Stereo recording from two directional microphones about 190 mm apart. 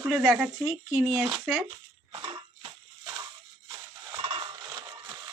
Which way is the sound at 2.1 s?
25° right (ahead or behind).